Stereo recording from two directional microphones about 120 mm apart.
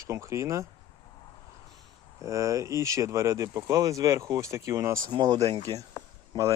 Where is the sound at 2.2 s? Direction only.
25° right (ahead or behind).